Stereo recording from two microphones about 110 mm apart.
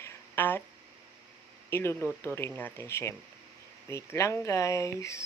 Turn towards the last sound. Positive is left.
turn(degrees=25)  # may be behind; listen again after turning